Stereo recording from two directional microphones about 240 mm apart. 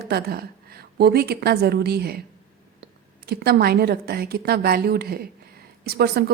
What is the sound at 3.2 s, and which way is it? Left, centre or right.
Speech, right.